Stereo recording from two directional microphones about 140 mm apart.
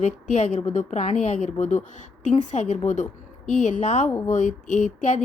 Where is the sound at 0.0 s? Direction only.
55° left (ahead or behind).